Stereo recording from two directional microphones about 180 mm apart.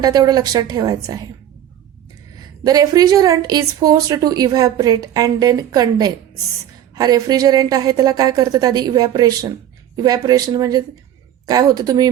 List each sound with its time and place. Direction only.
0.0 s a woman's voice: 20° right (ahead or behind)
2.6 s a woman's voice: 20° right (ahead or behind)